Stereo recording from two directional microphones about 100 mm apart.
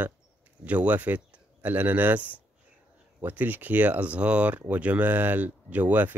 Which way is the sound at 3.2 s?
20° right (ahead or behind).